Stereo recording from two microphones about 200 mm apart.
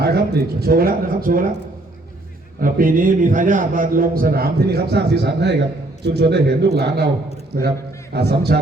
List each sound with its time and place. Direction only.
0.0 s a man's voice: 50° right (ahead or behind)
2.6 s a man's voice: 45° right (ahead or behind)